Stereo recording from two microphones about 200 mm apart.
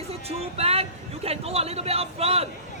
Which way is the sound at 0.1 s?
30° right (ahead or behind).